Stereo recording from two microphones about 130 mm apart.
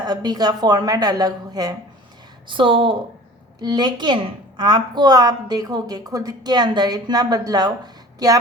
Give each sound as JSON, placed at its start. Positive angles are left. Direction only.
{"t": 0.0, "sound": "a woman's voice", "side_deg": -30}
{"t": 2.5, "sound": "a woman's voice", "side_deg": -40}